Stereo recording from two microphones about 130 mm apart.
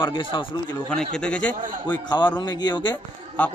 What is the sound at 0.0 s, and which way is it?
Speech, 40° left (ahead or behind).